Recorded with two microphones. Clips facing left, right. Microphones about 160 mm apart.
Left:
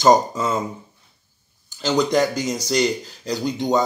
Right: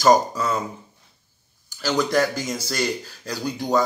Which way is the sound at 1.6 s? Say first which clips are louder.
Left 3 dB; 20° left (ahead or behind).